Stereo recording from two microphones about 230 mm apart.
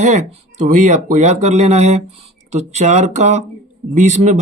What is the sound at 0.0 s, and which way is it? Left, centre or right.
A man's voice, right.